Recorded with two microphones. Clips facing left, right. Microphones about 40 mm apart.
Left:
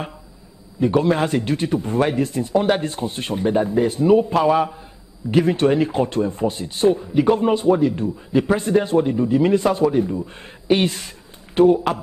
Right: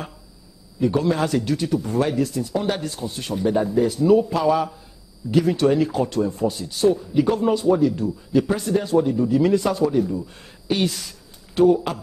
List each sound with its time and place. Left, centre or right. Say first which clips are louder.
0.7 s a man's voice: left 3 dB; left